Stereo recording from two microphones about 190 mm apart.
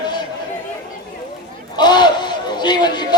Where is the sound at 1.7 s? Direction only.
20° left (ahead or behind).